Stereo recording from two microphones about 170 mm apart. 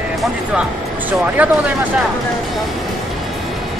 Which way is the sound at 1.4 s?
10° right (ahead or behind).